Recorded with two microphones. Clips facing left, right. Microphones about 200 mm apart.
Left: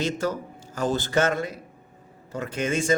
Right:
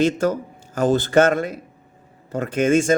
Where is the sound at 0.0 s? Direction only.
50° right (ahead or behind).